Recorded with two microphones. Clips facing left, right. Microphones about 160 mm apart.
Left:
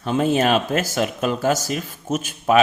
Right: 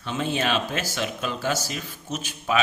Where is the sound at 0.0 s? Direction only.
45° left (ahead or behind).